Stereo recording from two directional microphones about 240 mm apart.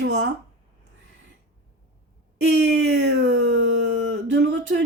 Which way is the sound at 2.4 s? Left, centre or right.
Right.